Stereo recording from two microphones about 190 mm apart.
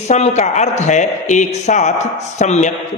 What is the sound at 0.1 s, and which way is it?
A man's voice, 35° left (ahead or behind).